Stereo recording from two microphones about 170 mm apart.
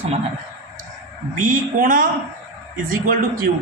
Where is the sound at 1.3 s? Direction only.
55° right (ahead or behind).